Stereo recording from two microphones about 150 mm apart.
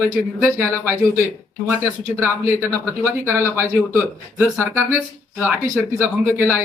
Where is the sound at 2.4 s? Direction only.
15° right (ahead or behind).